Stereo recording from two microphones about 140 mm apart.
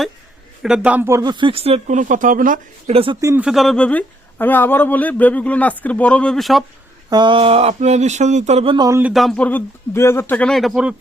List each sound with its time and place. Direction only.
0.6 s a man's voice: 5° right (ahead or behind)
1.2 s speech: 35° right (ahead or behind)
2.0 s speech: 65° right (ahead or behind)
2.9 s speech: 40° right (ahead or behind)
3.2 s a man's voice: 20° right (ahead or behind)
3.4 s speech: centre (ahead or behind)
7.1 s speech: 35° right (ahead or behind)
9.1 s speech: 5° left (ahead or behind)